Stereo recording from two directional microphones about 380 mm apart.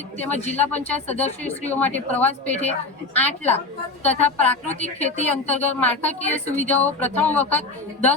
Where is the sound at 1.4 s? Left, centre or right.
Centre.